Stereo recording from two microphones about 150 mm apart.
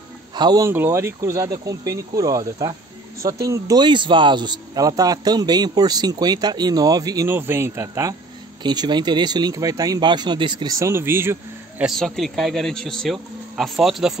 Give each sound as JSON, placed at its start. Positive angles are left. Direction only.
{"t": 0.3, "sound": "a man's voice", "side_deg": -30}
{"t": 11.8, "sound": "speech", "side_deg": 0}